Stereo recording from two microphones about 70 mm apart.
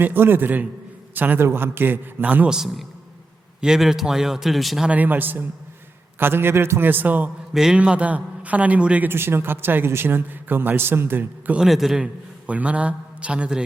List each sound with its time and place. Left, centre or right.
0.0 s a man's voice: right
2.5 s speech: centre
4.9 s a man's voice: right
7.5 s speech: centre
7.8 s a man's voice: centre
9.0 s a man's voice: right
11.5 s speech: centre
11.9 s a man's voice: centre